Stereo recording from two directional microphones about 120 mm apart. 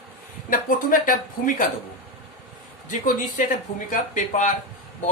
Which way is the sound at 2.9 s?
90° left.